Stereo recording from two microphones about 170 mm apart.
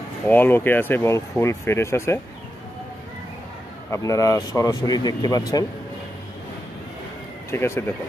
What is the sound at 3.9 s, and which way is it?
Speech, 20° left (ahead or behind).